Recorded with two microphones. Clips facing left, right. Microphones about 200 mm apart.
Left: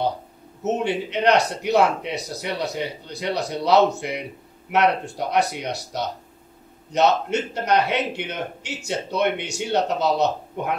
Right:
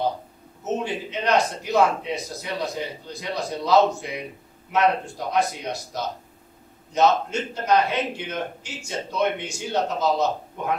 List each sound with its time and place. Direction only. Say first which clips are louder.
0.8 s a man's voice: left 6 dB; 70° left (ahead or behind)